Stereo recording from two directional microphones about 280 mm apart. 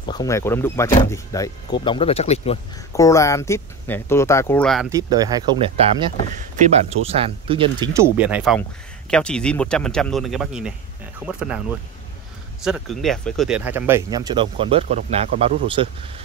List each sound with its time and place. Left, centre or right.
0.0 s speech: centre
2.9 s speech: centre
4.8 s speech: centre
8.2 s speech: centre
12.6 s speech: centre